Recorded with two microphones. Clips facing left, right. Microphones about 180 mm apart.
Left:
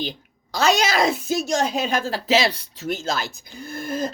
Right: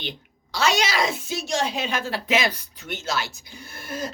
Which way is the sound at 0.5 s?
40° left (ahead or behind).